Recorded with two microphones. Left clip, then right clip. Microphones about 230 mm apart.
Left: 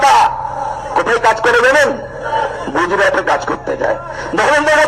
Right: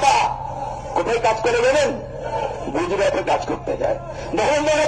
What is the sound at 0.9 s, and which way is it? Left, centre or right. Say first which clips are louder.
Speech: left 6 dB; centre.